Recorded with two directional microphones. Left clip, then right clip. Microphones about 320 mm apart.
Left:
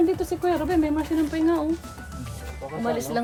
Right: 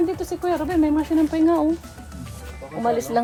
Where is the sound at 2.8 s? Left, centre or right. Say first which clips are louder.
Right 5 dB; centre.